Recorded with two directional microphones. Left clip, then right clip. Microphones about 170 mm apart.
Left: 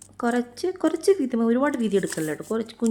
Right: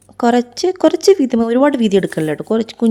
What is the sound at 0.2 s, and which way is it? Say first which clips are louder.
Speech: right 11 dB; 45° right (ahead or behind).